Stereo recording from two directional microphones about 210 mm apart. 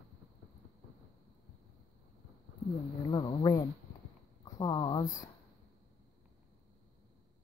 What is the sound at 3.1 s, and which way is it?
Insect, 20° left (ahead or behind).